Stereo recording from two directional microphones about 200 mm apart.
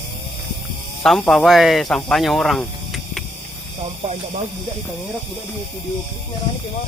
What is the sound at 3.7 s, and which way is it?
Speech, 30° right (ahead or behind).